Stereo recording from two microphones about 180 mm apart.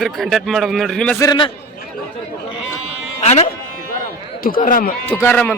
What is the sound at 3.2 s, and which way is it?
Speech, 40° left (ahead or behind).